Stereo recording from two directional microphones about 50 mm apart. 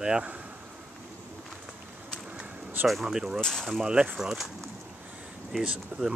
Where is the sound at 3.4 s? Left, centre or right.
Centre.